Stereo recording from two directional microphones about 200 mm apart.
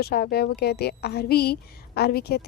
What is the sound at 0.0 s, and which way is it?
A woman's voice, 50° left (ahead or behind).